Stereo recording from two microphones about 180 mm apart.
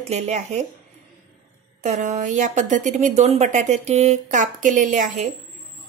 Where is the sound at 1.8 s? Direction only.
40° right (ahead or behind).